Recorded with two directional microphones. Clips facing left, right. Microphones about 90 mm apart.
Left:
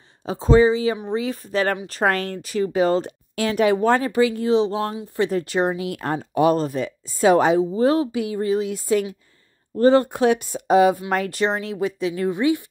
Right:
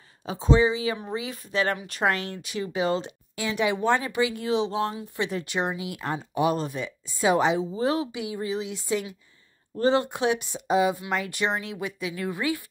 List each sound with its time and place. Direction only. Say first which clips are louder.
0.2 s speech: left 6 dB; 40° left (ahead or behind)
2.1 s speech: left 7 dB; 45° left (ahead or behind)
5.8 s speech: left 6 dB; 50° left (ahead or behind)
11.0 s speech: left 6 dB; 40° left (ahead or behind)
12.3 s speech: left 8 dB; 25° left (ahead or behind)